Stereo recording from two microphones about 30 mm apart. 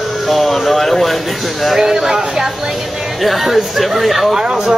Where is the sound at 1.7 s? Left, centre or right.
Centre.